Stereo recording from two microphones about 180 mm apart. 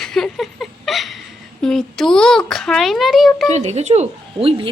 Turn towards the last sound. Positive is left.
turn(degrees=-30)  # may be behind; listen again after turning